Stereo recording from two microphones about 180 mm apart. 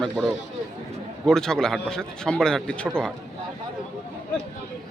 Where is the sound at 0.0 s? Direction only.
Centre (ahead or behind).